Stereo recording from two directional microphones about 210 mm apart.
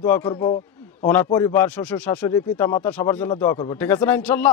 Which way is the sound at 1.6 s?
5° left (ahead or behind).